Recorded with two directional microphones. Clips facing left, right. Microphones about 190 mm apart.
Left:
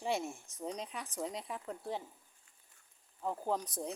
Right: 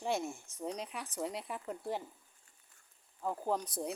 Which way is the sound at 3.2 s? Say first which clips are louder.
Right 1 dB; centre (ahead or behind).